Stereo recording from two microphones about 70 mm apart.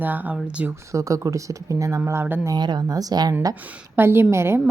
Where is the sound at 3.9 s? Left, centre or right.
Right.